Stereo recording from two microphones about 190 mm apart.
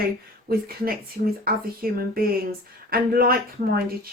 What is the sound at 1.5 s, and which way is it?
Speech, 50° right (ahead or behind).